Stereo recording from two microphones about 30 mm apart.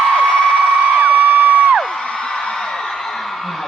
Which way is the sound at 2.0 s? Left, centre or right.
Left.